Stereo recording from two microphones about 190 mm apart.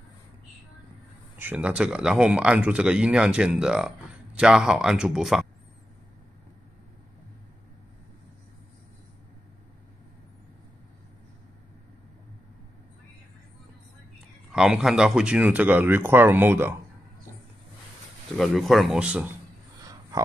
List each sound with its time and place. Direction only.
1.4 s speech: 10° right (ahead or behind)
14.5 s speech: 5° right (ahead or behind)
18.4 s speech: centre (ahead or behind)
19.8 s a sound: 20° right (ahead or behind)